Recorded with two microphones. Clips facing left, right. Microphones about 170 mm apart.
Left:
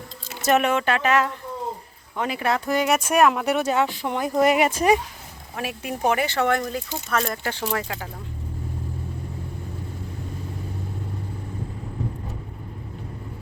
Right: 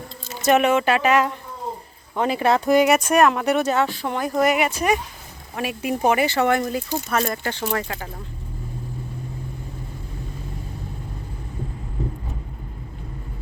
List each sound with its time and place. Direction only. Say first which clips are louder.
0.4 s speech: right 3 dB; centre (ahead or behind)
2.1 s speech: right 5 dB; 30° right (ahead or behind)
2.7 s speech: right 5 dB; 10° right (ahead or behind)
3.0 s speech: right 1 dB; 5° left (ahead or behind); by 4.8 s 35° left (ahead or behind)
5.5 s speech: right 5 dB; 5° right (ahead or behind)